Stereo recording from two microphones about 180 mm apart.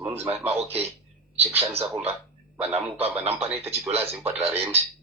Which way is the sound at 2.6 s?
35° right (ahead or behind).